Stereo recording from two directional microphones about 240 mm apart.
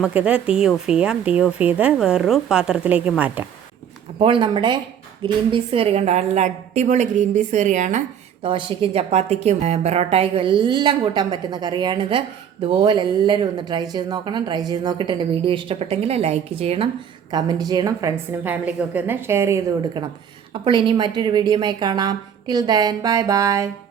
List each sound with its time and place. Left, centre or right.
0.0 s speech: centre
4.2 s a woman's voice: right